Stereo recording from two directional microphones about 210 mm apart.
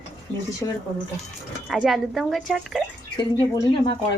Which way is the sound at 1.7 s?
Centre (ahead or behind).